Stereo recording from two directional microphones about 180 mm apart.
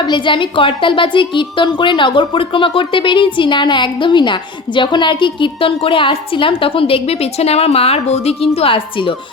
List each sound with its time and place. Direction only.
0.0 s a woman's voice: 25° left (ahead or behind)